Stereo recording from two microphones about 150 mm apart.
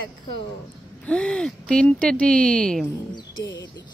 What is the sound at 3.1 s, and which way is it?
Speech, 25° left (ahead or behind).